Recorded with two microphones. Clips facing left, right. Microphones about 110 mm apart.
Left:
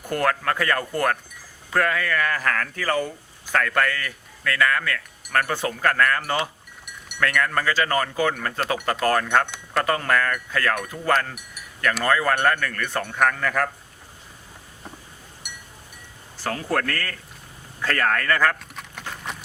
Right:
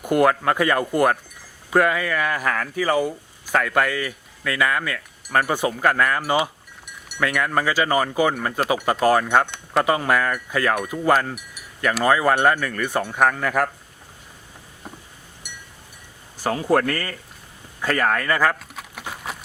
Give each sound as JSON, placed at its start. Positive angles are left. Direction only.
{"t": 0.0, "sound": "speech", "side_deg": -15}
{"t": 16.4, "sound": "speech", "side_deg": -15}
{"t": 17.8, "sound": "a sound", "side_deg": -15}